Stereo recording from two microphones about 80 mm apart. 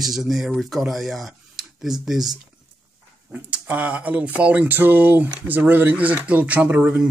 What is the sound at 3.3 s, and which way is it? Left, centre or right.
Speech, centre.